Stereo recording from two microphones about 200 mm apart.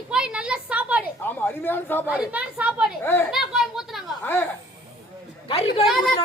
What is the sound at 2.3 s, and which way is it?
Speech, 5° right (ahead or behind).